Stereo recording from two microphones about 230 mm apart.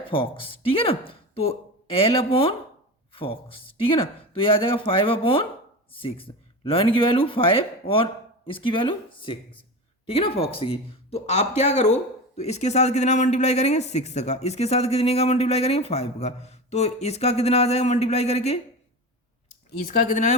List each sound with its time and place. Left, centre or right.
0.1 s speech: left